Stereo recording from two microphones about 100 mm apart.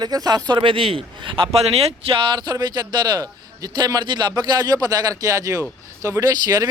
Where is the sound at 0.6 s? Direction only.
65° right (ahead or behind).